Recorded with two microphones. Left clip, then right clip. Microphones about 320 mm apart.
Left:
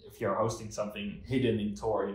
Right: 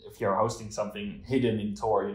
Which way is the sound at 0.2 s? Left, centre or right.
Centre.